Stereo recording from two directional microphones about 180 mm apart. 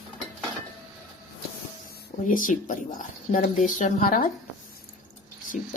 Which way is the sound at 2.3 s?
50° left (ahead or behind).